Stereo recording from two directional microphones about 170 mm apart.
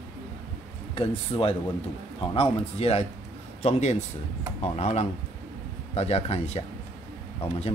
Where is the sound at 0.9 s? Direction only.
35° left (ahead or behind).